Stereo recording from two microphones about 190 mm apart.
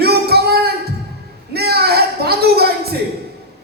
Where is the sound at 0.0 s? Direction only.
55° right (ahead or behind).